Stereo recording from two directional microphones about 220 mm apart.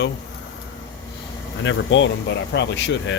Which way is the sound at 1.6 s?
55° left (ahead or behind).